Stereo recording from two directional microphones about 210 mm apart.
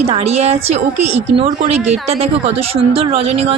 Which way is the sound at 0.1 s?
30° right (ahead or behind).